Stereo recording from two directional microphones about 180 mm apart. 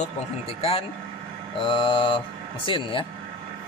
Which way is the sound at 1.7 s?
30° left (ahead or behind).